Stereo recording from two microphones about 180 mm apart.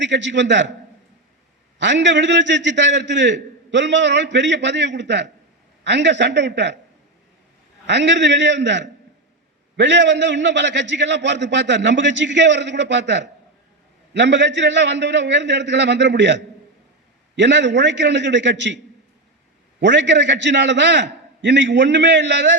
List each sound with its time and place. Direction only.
0.0 s a man's voice: 85° right
1.8 s a man's voice: 80° right
7.9 s a man's voice: 75° right (ahead or behind)
19.8 s a man's voice: 80° right